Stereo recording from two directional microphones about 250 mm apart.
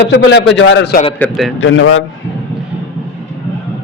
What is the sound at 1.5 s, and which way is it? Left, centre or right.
Speech, left.